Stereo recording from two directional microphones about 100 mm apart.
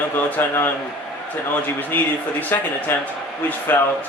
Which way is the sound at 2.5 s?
20° left (ahead or behind).